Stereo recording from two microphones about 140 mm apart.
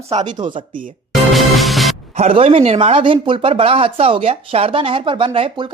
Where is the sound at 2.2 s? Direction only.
45° right (ahead or behind).